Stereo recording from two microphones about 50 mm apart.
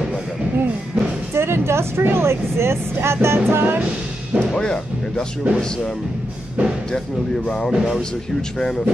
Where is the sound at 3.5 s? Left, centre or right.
Right.